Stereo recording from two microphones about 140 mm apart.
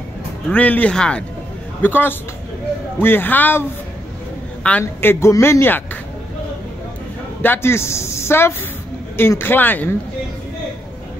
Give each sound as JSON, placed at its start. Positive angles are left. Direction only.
{"t": 0.5, "sound": "a man's voice", "side_deg": 10}
{"t": 4.6, "sound": "a man's voice", "side_deg": 15}
{"t": 7.4, "sound": "a man's voice", "side_deg": 15}